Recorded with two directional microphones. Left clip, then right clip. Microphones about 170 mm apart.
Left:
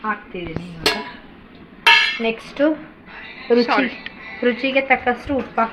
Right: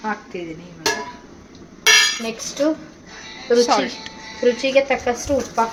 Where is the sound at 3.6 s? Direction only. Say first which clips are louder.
Even; 35° right (ahead or behind).